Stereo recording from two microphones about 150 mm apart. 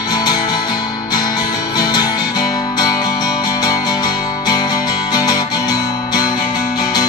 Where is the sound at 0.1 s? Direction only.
25° left (ahead or behind).